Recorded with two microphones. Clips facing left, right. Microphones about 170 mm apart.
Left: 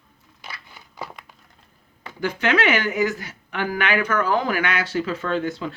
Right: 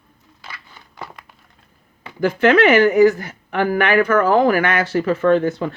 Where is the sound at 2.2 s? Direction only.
50° right (ahead or behind).